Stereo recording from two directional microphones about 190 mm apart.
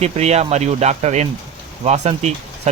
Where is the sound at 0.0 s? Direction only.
35° right (ahead or behind).